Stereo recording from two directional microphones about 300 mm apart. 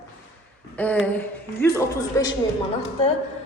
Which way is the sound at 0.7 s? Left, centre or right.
Centre.